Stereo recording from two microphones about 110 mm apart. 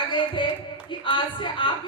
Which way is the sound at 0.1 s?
50° left (ahead or behind).